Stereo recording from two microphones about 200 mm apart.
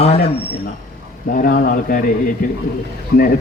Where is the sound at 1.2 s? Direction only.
45° left (ahead or behind).